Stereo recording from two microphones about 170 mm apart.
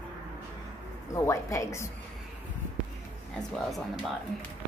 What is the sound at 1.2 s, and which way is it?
Speech, 20° left (ahead or behind).